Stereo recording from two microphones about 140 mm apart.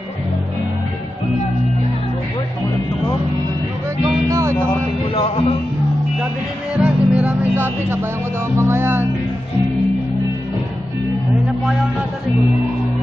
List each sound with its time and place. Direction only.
4.0 s music: 25° right (ahead or behind)
4.6 s a sound: 45° left (ahead or behind)
6.8 s music: 10° right (ahead or behind)